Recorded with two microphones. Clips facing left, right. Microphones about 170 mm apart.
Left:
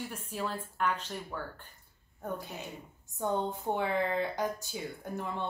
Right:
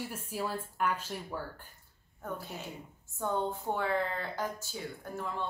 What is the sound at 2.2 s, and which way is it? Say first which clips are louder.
A woman's voice: left 2 dB; 15° left (ahead or behind).